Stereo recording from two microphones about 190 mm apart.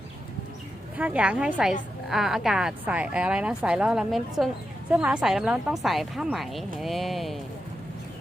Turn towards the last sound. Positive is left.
turn(degrees=0)  # may be behind; listen again after turning